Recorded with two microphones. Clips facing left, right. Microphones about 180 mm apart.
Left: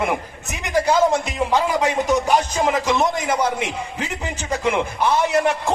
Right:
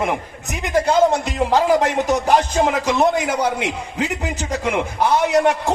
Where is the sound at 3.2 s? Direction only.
70° right (ahead or behind).